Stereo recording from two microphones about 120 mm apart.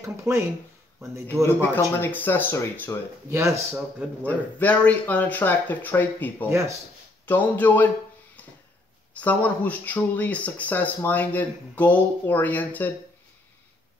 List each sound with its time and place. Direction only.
0.0 s speech: 25° right (ahead or behind)
1.8 s speech: 15° left (ahead or behind)
3.3 s speech: 25° right (ahead or behind)
4.3 s speech: 15° left (ahead or behind)
9.1 s speech: 15° left (ahead or behind)